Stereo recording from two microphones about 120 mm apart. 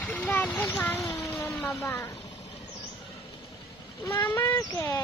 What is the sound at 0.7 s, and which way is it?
Speech, 15° left (ahead or behind).